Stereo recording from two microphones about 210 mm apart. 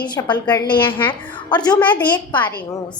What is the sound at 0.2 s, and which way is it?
Speech, 15° left (ahead or behind).